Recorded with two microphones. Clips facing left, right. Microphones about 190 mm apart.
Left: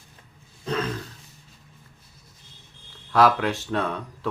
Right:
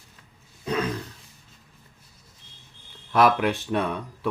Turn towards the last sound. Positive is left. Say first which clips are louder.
# right 1 dB
turn(degrees=-15)  # may be behind; listen again after turning